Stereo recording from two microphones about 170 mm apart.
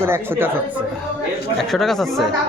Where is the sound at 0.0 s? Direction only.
15° right (ahead or behind).